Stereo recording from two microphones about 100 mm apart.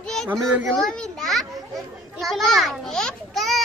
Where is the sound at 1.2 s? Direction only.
Centre (ahead or behind).